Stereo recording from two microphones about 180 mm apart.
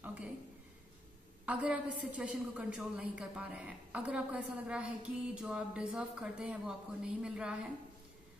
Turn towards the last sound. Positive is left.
turn(degrees=-5)  # may be behind; listen again after turning